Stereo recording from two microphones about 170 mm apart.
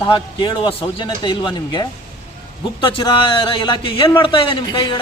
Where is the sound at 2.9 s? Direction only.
30° left (ahead or behind).